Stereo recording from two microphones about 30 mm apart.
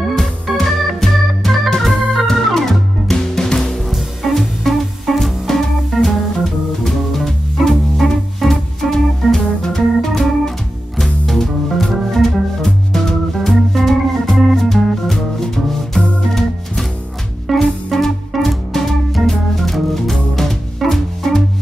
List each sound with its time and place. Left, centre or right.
0.1 s organ: centre
3.1 s music: centre
3.9 s music: centre
5.2 s organ: centre
8.0 s music: centre
8.4 s organ: centre
11.2 s music: centre
17.5 s music: centre
19.2 s organ: centre
20.9 s music: centre